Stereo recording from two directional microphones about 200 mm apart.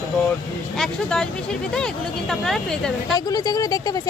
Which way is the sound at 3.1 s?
20° left (ahead or behind).